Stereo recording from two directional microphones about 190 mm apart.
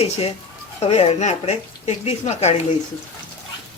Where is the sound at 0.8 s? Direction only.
35° left (ahead or behind).